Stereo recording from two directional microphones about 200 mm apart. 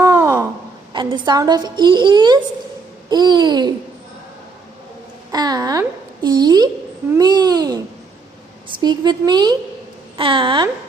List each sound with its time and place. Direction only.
0.0 s wail: 15° right (ahead or behind)
1.1 s a woman's voice: 20° right (ahead or behind)
5.3 s a child's voice: 20° right (ahead or behind)